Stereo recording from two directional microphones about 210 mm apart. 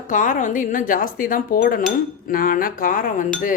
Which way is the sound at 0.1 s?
40° left (ahead or behind).